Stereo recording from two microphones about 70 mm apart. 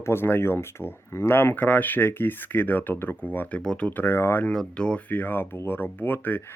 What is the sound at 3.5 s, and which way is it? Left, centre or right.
Speech, centre.